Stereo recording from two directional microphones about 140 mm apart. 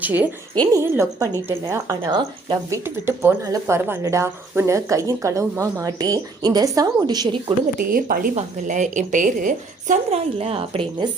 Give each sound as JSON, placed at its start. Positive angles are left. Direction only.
{"t": 0.0, "sound": "speech", "side_deg": -10}
{"t": 0.7, "sound": "speech", "side_deg": -20}
{"t": 2.8, "sound": "speech", "side_deg": -15}
{"t": 7.9, "sound": "speech", "side_deg": -90}